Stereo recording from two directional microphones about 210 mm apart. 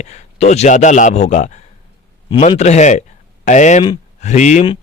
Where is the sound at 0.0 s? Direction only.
30° left (ahead or behind).